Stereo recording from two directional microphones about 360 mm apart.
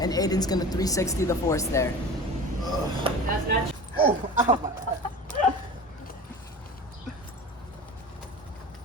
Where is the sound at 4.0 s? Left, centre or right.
Right.